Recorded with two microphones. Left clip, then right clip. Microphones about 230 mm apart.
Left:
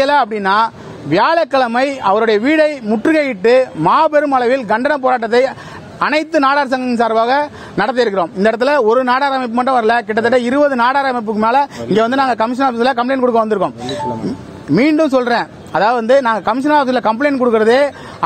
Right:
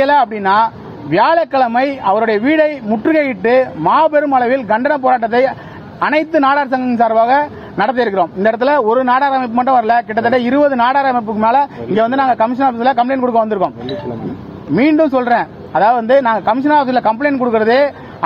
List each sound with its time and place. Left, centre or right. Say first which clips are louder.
0.0 s a man's voice: right 1 dB; left
14.7 s a man's voice: even; left